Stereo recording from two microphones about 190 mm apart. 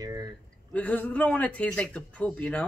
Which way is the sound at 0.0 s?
20° right (ahead or behind).